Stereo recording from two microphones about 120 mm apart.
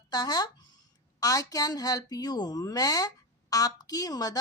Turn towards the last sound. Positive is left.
turn(degrees=30)  # may be behind; listen again after turning